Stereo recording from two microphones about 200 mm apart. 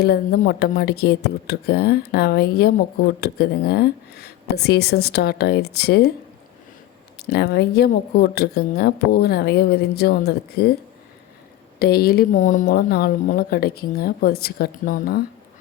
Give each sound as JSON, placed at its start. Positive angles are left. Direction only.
{"t": 0.0, "sound": "speech", "side_deg": 50}
{"t": 7.2, "sound": "speech", "side_deg": 55}
{"t": 11.8, "sound": "speech", "side_deg": 50}